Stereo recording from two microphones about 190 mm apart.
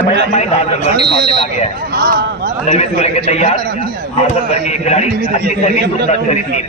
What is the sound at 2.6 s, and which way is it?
A man's voice, 35° left (ahead or behind).